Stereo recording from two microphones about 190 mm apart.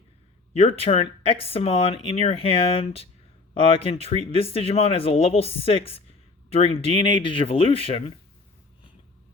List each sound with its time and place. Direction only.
0.5 s speech: 30° left (ahead or behind)